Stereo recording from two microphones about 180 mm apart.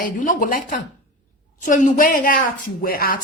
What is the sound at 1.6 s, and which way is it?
Speech, 45° left (ahead or behind).